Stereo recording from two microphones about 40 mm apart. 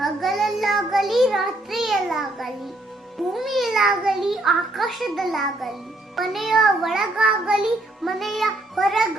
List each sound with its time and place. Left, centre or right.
0.0 s child singing: centre
3.2 s a child's voice: centre
7.0 s child singing: centre
8.0 s a child's voice: centre